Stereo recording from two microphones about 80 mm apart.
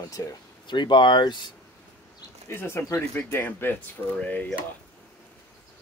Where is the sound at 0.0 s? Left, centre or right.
Left.